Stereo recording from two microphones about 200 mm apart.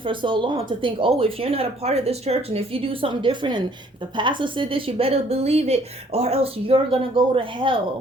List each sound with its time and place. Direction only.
0.0 s speech: 25° right (ahead or behind)